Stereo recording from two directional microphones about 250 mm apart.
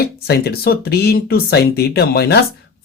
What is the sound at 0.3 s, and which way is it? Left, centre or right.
Speech, left.